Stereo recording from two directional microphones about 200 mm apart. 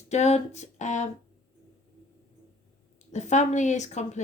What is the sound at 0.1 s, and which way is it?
Speech, 35° left (ahead or behind).